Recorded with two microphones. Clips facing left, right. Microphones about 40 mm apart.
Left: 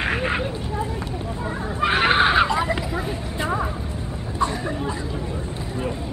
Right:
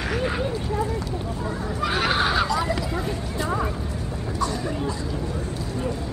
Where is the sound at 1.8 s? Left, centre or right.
Left.